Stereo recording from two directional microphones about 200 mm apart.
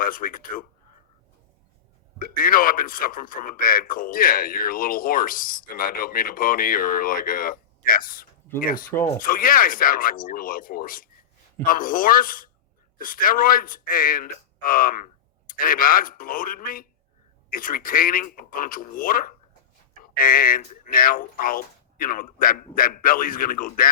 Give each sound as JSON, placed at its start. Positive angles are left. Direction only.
{"t": 0.0, "sound": "a man's voice", "side_deg": 45}
{"t": 2.1, "sound": "a man's voice", "side_deg": 45}